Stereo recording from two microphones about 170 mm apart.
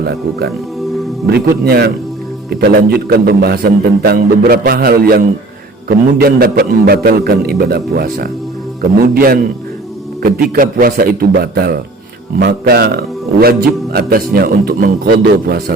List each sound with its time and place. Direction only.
1.3 s a man's voice: 65° right (ahead or behind)